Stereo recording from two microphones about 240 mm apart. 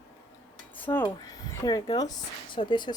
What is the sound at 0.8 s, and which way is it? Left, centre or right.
Speech, centre.